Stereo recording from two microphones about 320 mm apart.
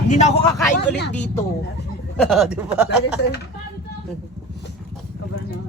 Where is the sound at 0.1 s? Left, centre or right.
Left.